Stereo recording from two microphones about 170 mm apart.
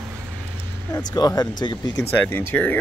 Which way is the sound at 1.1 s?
25° left (ahead or behind).